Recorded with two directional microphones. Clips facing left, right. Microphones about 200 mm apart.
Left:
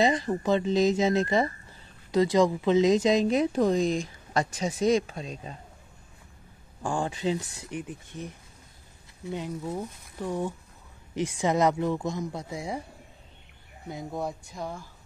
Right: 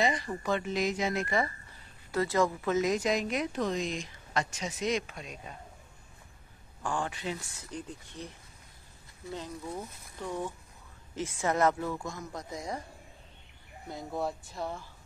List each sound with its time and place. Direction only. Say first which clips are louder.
0.0 s a woman's voice: left 6 dB; 25° left (ahead or behind)
6.8 s speech: left 5 dB; 30° left (ahead or behind)
7.8 s speech: left 4 dB; 15° left (ahead or behind)
9.3 s speech: left 6 dB; 15° left (ahead or behind)
14.6 s speech: left 1 dB; 5° right (ahead or behind)